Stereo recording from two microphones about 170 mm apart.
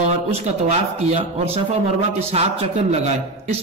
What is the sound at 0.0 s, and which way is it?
A man's voice, 40° right (ahead or behind).